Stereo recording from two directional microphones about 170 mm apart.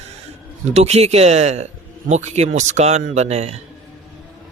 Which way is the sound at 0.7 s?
40° right (ahead or behind).